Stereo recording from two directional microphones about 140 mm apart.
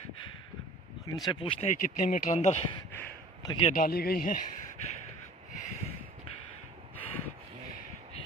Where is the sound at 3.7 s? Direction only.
90° left.